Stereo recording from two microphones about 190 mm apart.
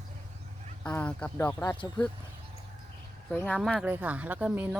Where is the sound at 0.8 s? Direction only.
5° left (ahead or behind).